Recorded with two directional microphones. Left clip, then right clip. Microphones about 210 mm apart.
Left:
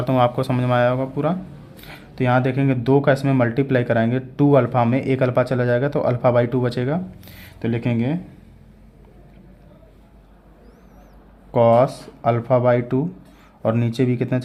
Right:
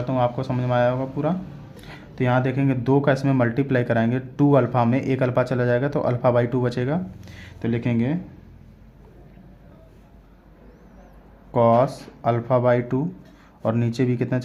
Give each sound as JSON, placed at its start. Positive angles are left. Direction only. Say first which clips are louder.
{"t": 0.0, "sound": "speech", "louder": "left 5 dB", "side_deg": 25}
{"t": 11.5, "sound": "speech", "louder": "left 3 dB", "side_deg": 15}